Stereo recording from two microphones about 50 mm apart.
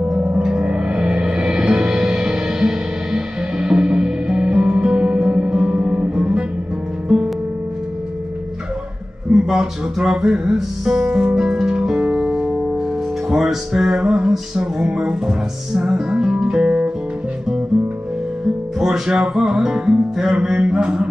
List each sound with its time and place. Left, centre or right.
0.1 s gong: right
0.4 s music: centre
9.3 s music: centre
18.8 s music: centre